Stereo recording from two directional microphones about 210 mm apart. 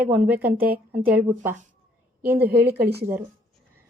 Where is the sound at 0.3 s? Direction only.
10° right (ahead or behind).